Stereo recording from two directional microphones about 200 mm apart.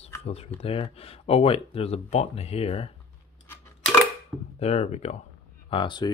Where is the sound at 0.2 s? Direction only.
30° left (ahead or behind).